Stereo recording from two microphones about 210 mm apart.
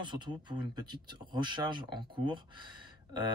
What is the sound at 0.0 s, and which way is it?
Speech, 20° right (ahead or behind).